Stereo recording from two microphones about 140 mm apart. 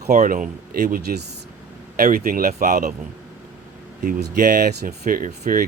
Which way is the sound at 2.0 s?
90° right.